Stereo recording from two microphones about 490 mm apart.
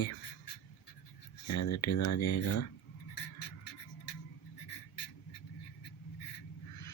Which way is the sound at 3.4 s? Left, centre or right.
Left.